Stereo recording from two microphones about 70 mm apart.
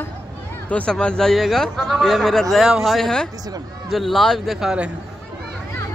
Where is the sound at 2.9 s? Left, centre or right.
Centre.